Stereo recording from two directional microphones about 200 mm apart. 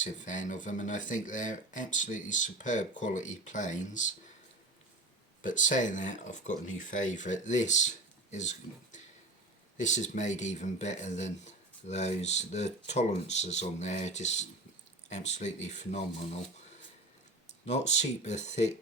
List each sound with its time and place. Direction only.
0.0 s speech: 40° left (ahead or behind)
5.4 s speech: 40° left (ahead or behind)
17.7 s speech: 35° left (ahead or behind)